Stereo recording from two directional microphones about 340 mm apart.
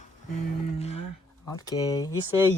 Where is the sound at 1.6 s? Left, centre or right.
Centre.